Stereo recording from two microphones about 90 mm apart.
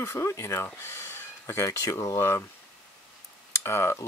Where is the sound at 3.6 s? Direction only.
30° left (ahead or behind).